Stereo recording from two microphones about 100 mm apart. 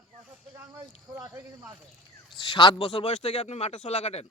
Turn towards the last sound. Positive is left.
turn(degrees=90)